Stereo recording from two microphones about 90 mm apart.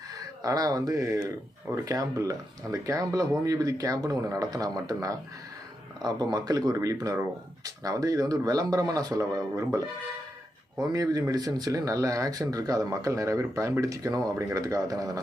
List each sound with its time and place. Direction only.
0.4 s speech: 45° right (ahead or behind)